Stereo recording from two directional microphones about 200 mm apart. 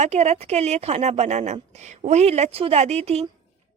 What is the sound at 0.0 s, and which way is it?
A woman's voice, 35° right (ahead or behind).